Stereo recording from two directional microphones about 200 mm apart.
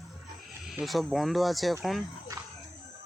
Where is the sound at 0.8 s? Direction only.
Centre (ahead or behind).